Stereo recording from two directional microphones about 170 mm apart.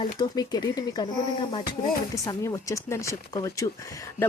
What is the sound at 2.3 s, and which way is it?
Speech, 20° left (ahead or behind).